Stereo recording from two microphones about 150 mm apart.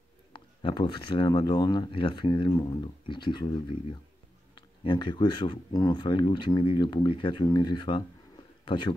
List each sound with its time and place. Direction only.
0.3 s a man's voice: 35° left (ahead or behind)